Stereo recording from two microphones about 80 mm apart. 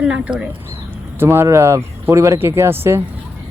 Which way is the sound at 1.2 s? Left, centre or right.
Right.